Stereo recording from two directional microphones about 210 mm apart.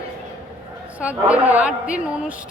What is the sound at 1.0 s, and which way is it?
Speech, 5° right (ahead or behind).